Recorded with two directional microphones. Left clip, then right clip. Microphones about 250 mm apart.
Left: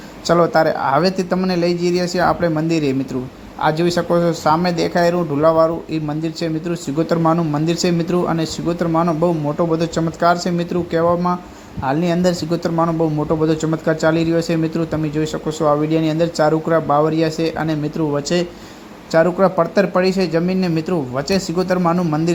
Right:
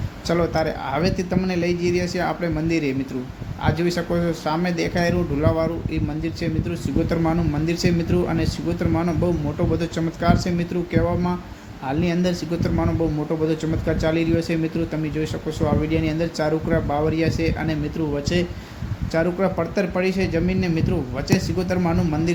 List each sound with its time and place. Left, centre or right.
0.3 s a man's voice: centre